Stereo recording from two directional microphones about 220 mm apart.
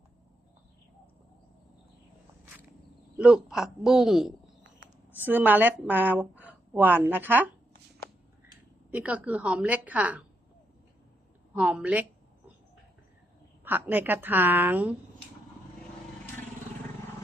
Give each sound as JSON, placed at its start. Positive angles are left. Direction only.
{"t": 3.2, "sound": "a woman's voice", "side_deg": -5}
{"t": 8.9, "sound": "a woman's voice", "side_deg": -5}
{"t": 11.5, "sound": "a woman's voice", "side_deg": -5}
{"t": 13.7, "sound": "a woman's voice", "side_deg": -10}